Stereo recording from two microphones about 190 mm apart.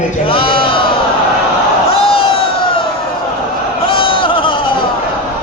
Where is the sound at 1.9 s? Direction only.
30° left (ahead or behind).